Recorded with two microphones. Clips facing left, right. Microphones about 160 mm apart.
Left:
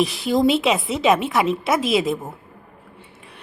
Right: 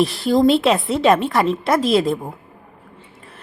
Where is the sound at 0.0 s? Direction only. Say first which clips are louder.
Right 3 dB; centre (ahead or behind).